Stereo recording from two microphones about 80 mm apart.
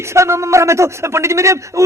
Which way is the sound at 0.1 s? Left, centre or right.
Right.